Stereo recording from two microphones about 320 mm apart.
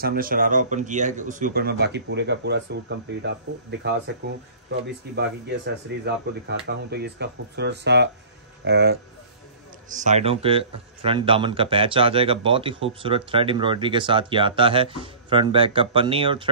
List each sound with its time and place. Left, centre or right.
0.0 s a man's voice: right